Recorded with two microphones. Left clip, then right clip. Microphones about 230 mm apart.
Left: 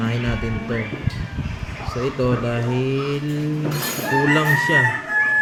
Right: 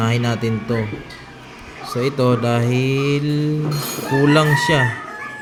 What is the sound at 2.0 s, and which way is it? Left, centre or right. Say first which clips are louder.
Speech: right 4 dB; right.